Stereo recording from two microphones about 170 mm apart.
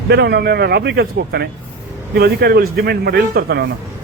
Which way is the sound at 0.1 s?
80° right.